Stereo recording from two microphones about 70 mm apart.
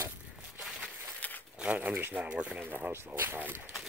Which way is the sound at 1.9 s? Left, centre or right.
Right.